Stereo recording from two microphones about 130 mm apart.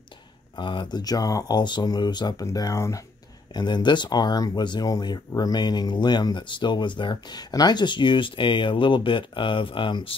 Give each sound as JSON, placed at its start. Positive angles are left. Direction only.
{"t": 0.6, "sound": "speech", "side_deg": 35}
{"t": 3.5, "sound": "speech", "side_deg": 35}